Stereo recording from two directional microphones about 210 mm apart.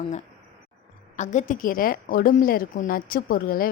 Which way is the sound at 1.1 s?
35° left (ahead or behind).